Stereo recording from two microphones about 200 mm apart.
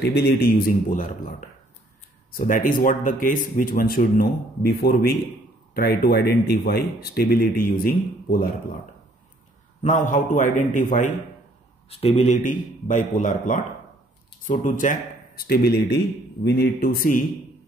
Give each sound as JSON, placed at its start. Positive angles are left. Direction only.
{"t": 0.0, "sound": "speech", "side_deg": 55}
{"t": 2.3, "sound": "speech", "side_deg": 40}
{"t": 9.8, "sound": "a man's voice", "side_deg": 40}
{"t": 11.9, "sound": "a man's voice", "side_deg": 30}